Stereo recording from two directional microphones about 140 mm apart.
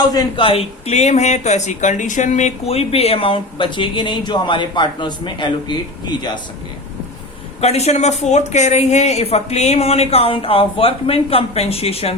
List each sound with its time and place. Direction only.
0.1 s speech: 40° left (ahead or behind)
7.6 s speech: 50° left (ahead or behind)